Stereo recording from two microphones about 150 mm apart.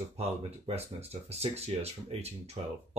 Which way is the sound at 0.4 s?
45° right (ahead or behind).